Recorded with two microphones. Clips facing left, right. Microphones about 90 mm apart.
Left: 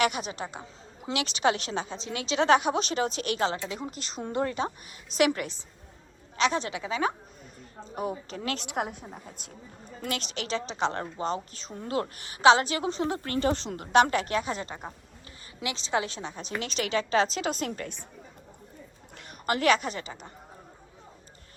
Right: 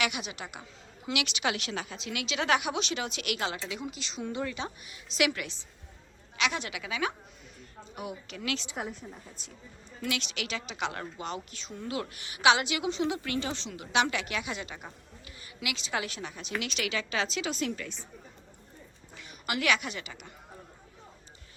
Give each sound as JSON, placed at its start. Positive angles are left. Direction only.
{"t": 0.0, "sound": "a woman's voice", "side_deg": 40}
{"t": 8.5, "sound": "a woman's voice", "side_deg": 60}
{"t": 10.0, "sound": "a woman's voice", "side_deg": 40}
{"t": 19.1, "sound": "a woman's voice", "side_deg": 50}